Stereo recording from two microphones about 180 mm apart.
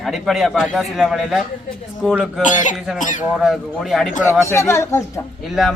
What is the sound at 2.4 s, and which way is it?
Speech, 45° left (ahead or behind).